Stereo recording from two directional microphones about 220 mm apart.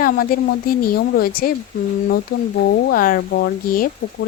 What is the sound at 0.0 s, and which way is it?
Speech, 40° left (ahead or behind).